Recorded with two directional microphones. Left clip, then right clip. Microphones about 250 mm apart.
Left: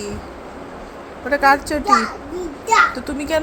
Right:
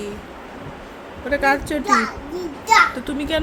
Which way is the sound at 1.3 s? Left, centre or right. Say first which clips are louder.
Left 4 dB; centre.